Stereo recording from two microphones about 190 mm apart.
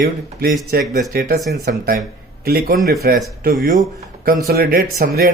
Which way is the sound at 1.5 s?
60° right (ahead or behind).